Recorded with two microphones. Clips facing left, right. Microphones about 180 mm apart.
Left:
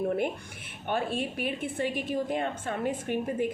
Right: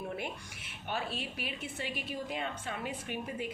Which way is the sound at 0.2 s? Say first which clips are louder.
Left 10 dB; 55° left (ahead or behind).